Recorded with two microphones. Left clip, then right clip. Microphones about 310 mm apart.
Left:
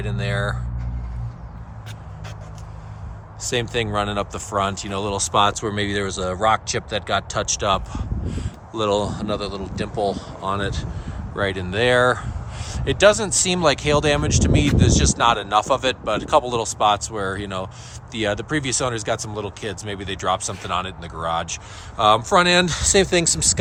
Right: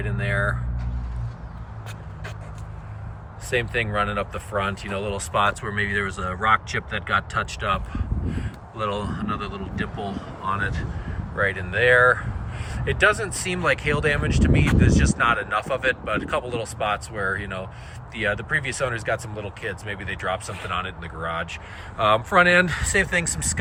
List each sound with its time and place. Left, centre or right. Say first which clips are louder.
0.0 s speech: right 1 dB; centre
3.4 s speech: left 1 dB; centre
10.4 s speech: left 1 dB; centre